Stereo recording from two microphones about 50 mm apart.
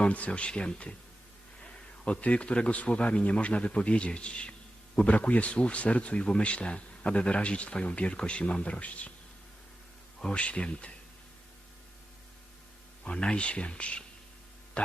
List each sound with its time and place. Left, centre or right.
0.0 s speech: left
2.0 s speech: left
10.2 s speech: centre
13.1 s speech: left